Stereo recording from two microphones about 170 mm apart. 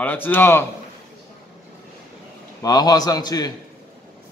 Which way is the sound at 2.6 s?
20° left (ahead or behind).